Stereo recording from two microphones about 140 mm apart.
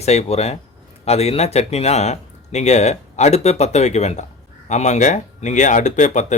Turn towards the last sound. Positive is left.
turn(degrees=60)  # may be behind; listen again after turning